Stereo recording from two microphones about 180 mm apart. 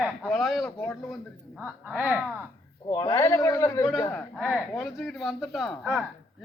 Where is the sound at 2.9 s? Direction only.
20° left (ahead or behind).